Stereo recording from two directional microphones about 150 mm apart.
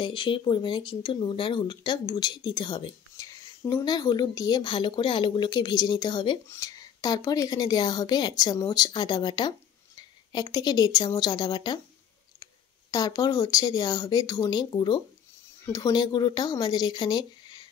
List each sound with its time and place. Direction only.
0.0 s speech: 35° left (ahead or behind)
6.4 s a woman's voice: 20° left (ahead or behind)
12.9 s a woman's voice: 25° left (ahead or behind)